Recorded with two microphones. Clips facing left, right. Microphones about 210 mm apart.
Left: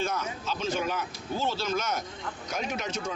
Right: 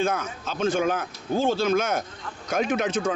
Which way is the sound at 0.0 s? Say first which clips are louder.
Right 5 dB; 55° right (ahead or behind).